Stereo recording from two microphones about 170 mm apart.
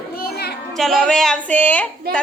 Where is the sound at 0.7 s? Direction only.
Centre (ahead or behind).